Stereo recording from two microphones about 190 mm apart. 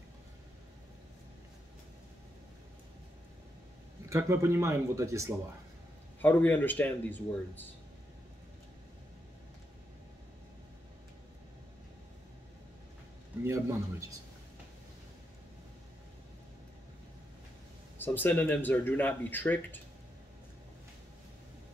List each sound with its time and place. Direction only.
4.1 s speech: 15° right (ahead or behind)
6.2 s speech: 10° left (ahead or behind)
13.4 s speech: 15° right (ahead or behind)
17.9 s speech: 10° left (ahead or behind)